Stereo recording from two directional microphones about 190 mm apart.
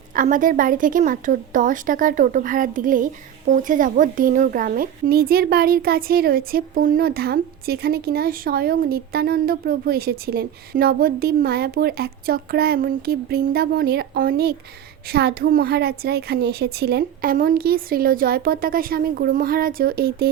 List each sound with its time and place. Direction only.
0.2 s a woman's voice: 45° right (ahead or behind)